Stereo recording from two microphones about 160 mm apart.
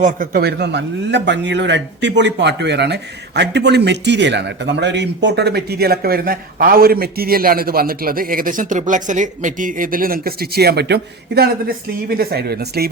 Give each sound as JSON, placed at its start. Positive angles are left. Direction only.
{"t": 0.0, "sound": "a man's voice", "side_deg": -60}